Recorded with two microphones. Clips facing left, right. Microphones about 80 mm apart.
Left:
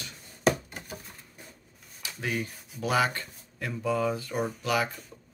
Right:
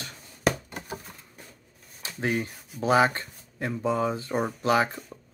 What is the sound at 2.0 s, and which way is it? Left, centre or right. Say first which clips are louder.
Speech: right 4 dB; right.